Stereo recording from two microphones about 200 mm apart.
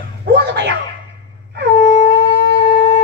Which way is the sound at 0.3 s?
60° right (ahead or behind).